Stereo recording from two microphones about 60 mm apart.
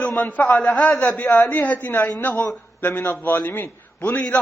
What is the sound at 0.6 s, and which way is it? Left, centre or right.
A man's voice, left.